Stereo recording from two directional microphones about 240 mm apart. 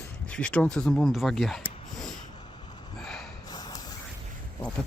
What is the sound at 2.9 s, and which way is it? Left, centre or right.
Snort, centre.